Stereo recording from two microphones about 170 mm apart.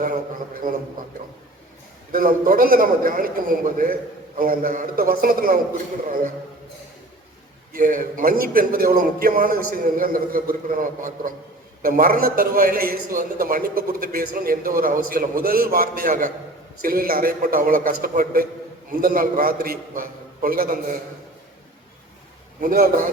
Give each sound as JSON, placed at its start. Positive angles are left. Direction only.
{"t": 0.6, "sound": "a man's voice", "side_deg": -55}
{"t": 2.1, "sound": "a man's voice", "side_deg": -55}
{"t": 7.7, "sound": "a man's voice", "side_deg": -55}
{"t": 22.6, "sound": "a man's voice", "side_deg": -55}